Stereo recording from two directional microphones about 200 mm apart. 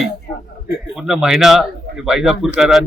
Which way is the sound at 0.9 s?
Centre (ahead or behind).